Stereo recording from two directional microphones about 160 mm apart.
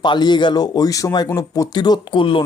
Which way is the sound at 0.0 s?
30° left (ahead or behind).